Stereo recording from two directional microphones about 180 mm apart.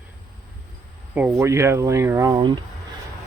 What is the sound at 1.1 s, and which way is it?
Speech, 10° right (ahead or behind).